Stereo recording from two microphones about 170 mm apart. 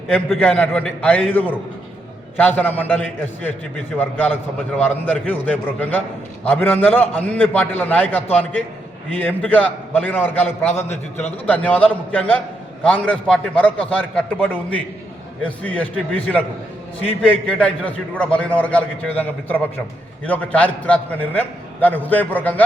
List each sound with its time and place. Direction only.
0.1 s a man's voice: 5° left (ahead or behind)
10.8 s a man's voice: 40° left (ahead or behind)
11.4 s a man's voice: 10° left (ahead or behind)
17.4 s a man's voice: 5° left (ahead or behind)